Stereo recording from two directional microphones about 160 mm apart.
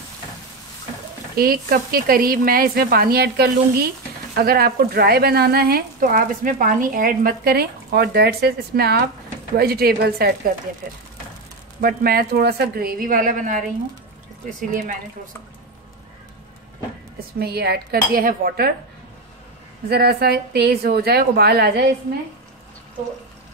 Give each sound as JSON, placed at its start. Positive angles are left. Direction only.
{"t": 1.3, "sound": "speech", "side_deg": -65}
{"t": 11.8, "sound": "speech", "side_deg": -70}
{"t": 14.7, "sound": "speech", "side_deg": -50}
{"t": 17.4, "sound": "a woman's voice", "side_deg": -85}
{"t": 19.9, "sound": "a woman's voice", "side_deg": -80}